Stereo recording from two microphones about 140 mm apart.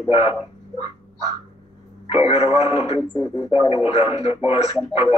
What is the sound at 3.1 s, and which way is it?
Speech, 35° left (ahead or behind).